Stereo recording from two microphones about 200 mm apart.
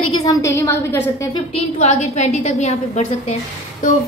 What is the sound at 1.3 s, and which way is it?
A woman's voice, 30° left (ahead or behind).